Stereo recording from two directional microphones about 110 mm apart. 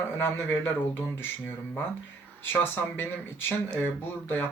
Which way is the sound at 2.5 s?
20° left (ahead or behind).